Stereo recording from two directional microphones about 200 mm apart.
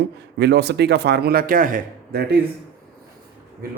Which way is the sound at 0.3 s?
55° right (ahead or behind).